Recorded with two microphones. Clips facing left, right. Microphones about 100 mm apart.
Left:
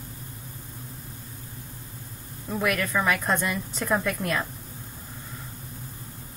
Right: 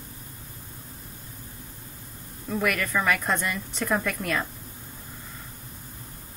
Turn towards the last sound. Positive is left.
turn(degrees=5)  # may be behind; listen again after turning